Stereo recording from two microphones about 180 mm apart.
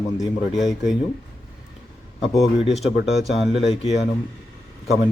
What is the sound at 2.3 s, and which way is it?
Speech, centre (ahead or behind).